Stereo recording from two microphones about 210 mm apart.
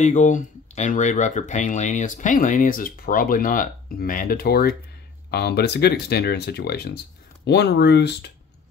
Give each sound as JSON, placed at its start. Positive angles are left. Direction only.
{"t": 0.0, "sound": "speech", "side_deg": 35}